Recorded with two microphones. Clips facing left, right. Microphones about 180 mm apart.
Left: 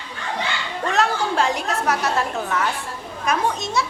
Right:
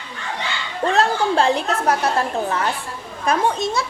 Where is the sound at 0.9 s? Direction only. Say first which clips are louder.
Right 2 dB; 30° right (ahead or behind).